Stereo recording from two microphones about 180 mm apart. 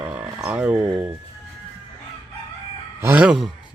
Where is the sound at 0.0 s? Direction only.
5° right (ahead or behind).